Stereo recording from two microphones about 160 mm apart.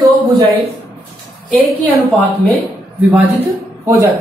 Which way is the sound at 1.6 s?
10° right (ahead or behind).